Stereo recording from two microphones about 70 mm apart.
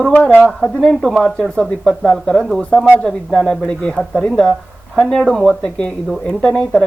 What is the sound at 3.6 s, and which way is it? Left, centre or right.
Speech, centre.